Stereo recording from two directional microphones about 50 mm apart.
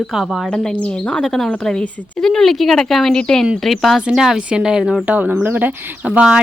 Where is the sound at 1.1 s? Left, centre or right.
Centre.